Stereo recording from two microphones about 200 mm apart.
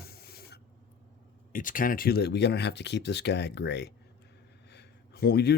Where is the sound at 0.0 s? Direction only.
50° left (ahead or behind).